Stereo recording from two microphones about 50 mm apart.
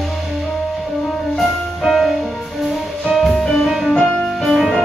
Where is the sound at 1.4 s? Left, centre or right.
Centre.